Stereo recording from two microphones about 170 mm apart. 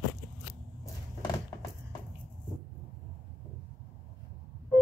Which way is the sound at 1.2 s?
20° left (ahead or behind).